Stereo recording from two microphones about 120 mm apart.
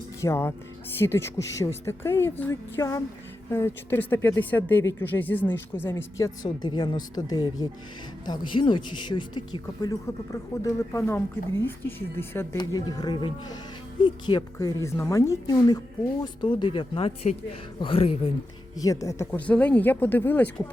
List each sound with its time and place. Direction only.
0.2 s speech: 20° left (ahead or behind)
12.5 s speech: 35° left (ahead or behind)
16.2 s speech: 40° left (ahead or behind)
18.8 s speech: 25° left (ahead or behind)
19.5 s speech: 10° left (ahead or behind)